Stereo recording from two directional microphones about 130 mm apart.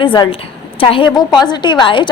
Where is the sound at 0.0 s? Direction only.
40° left (ahead or behind).